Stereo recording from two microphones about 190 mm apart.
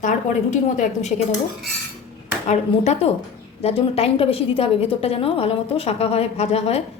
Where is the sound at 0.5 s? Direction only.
40° left (ahead or behind).